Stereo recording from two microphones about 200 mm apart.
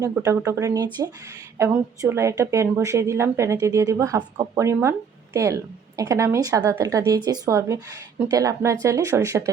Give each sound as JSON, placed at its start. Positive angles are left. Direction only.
{"t": 0.0, "sound": "a woman's voice", "side_deg": -15}